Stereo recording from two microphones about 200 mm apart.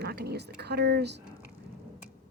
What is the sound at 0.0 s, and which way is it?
Speech, 55° right (ahead or behind).